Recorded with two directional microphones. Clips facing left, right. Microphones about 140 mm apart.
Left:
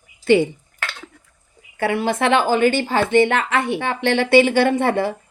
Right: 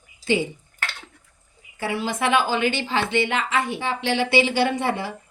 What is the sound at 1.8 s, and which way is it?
Speech, 60° left (ahead or behind).